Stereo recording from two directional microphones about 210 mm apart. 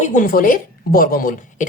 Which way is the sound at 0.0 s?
40° left (ahead or behind).